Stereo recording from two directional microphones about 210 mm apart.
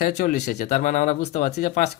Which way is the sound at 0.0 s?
40° left (ahead or behind).